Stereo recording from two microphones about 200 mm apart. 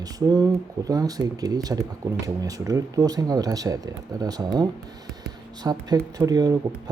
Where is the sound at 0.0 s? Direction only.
15° right (ahead or behind).